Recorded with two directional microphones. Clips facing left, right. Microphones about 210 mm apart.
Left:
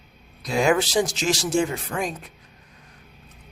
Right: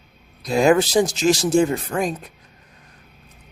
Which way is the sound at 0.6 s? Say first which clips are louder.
Right 4 dB; 40° right (ahead or behind).